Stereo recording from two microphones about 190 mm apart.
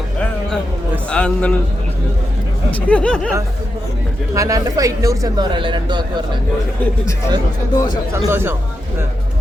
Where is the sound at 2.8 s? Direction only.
5° left (ahead or behind).